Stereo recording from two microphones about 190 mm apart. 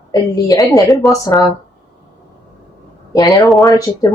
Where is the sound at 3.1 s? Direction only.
20° left (ahead or behind).